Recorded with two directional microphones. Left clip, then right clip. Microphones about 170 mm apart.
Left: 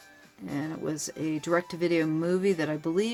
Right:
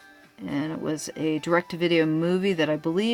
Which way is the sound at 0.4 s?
35° right (ahead or behind).